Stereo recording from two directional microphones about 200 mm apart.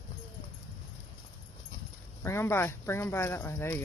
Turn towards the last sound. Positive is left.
turn(degrees=10)  # may be behind; listen again after turning